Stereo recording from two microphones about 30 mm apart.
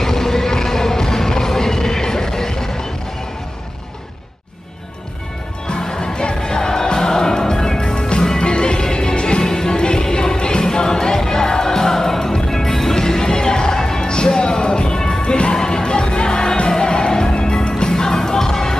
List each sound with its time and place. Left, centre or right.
0.0 s music: centre
5.7 s music: left
15.2 s music: left
17.9 s music: centre